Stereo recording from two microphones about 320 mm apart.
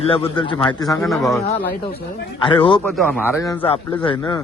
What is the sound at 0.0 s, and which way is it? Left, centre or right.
Speech, centre.